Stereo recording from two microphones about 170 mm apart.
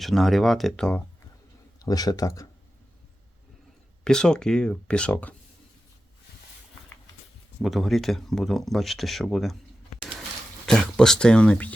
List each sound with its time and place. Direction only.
0.0 s speech: centre (ahead or behind)
1.8 s speech: 20° left (ahead or behind)
4.0 s speech: 5° left (ahead or behind)
7.6 s speech: centre (ahead or behind)
10.7 s speech: 5° left (ahead or behind)